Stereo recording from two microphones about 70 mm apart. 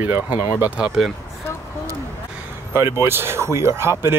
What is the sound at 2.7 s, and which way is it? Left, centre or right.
Speech, right.